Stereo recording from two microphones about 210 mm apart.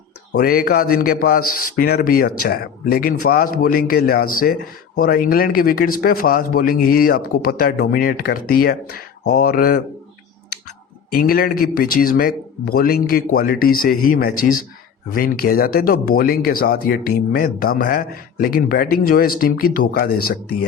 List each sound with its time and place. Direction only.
0.3 s speech: 45° left (ahead or behind)
11.1 s speech: 45° left (ahead or behind)